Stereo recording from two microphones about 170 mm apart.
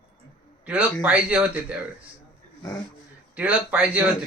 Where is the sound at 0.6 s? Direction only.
10° right (ahead or behind).